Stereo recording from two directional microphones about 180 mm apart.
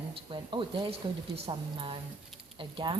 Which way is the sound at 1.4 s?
30° right (ahead or behind).